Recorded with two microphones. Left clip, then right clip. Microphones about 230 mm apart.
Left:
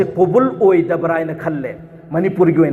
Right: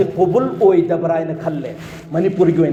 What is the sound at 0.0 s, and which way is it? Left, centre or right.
A man's voice, left.